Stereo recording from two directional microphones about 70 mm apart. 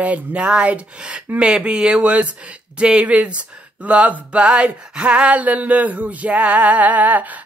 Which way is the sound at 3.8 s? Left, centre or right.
Right.